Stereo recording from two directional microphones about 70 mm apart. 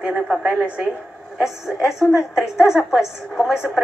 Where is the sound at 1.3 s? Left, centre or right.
Centre.